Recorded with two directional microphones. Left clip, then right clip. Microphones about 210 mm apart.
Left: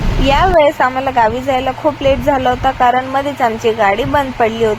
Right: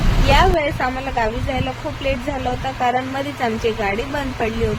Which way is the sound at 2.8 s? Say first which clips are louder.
Left 5 dB; 20° left (ahead or behind).